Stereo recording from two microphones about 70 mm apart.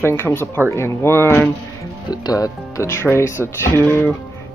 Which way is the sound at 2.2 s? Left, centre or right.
Left.